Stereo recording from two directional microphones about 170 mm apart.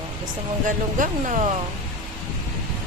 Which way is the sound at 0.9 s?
45° right (ahead or behind).